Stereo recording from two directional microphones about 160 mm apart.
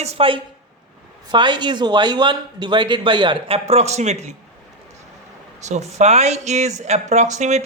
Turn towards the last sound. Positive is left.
turn(degrees=-45)  # may be behind; listen again after turning